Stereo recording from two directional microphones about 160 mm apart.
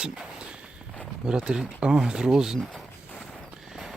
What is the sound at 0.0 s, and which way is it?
Walk, 5° right (ahead or behind).